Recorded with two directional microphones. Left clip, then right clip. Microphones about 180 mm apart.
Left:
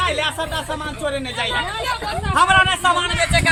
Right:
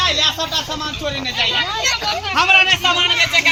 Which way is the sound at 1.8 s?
50° left (ahead or behind).